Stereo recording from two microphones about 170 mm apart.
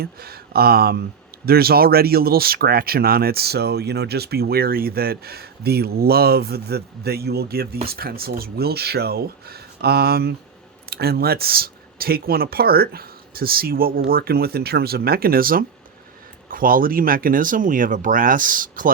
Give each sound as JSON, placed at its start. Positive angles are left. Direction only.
{"t": 0.0, "sound": "speech", "side_deg": -65}